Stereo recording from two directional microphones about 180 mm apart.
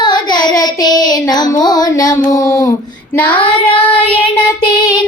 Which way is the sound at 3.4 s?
30° left (ahead or behind).